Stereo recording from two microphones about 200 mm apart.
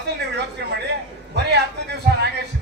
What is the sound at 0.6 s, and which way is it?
A man's voice, 55° right (ahead or behind).